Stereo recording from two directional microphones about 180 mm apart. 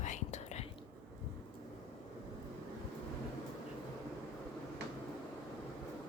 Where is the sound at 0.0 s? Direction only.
40° left (ahead or behind).